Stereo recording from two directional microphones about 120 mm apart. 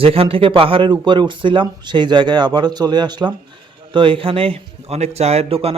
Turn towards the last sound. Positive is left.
turn(degrees=-55)  # may be behind; listen again after turning